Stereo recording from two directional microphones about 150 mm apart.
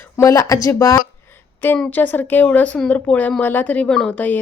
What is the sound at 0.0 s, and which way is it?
Speech, 20° left (ahead or behind).